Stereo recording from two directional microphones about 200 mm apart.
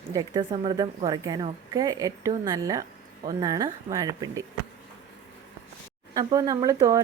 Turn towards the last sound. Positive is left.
turn(degrees=-15)  # may be behind; listen again after turning